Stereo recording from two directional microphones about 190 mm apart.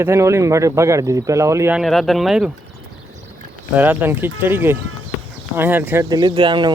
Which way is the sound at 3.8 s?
10° right (ahead or behind).